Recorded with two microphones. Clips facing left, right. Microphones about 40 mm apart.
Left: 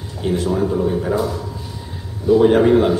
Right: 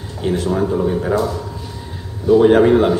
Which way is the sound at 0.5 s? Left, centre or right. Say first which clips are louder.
Right 1 dB; centre.